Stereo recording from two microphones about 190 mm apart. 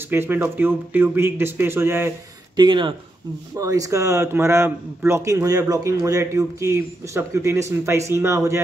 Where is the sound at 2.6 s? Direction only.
25° right (ahead or behind).